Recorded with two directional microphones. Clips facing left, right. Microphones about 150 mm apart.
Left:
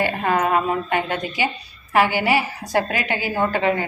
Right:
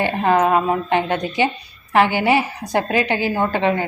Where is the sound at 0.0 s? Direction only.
25° right (ahead or behind).